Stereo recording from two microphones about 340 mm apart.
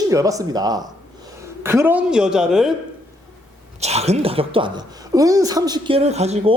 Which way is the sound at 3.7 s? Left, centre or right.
Centre.